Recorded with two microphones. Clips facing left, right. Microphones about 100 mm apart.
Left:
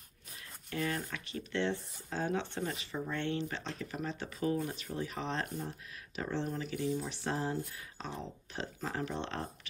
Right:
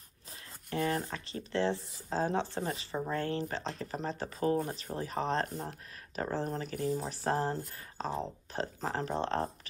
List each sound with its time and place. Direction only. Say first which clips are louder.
0.7 s speech: right 4 dB; 35° right (ahead or behind)